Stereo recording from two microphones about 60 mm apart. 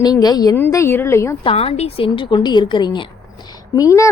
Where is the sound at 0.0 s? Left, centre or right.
Left.